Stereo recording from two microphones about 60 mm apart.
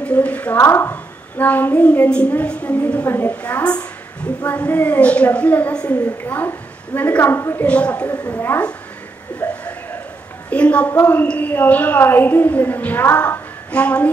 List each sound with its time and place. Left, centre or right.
0.0 s a woman's voice: left
0.6 s a woman's voice: left
1.4 s a woman's voice: left
7.2 s a woman's voice: left
7.6 s a woman's voice: left
8.3 s a woman's voice: left